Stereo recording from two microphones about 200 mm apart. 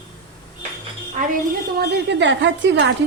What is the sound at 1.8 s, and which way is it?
A woman's voice, 60° right (ahead or behind).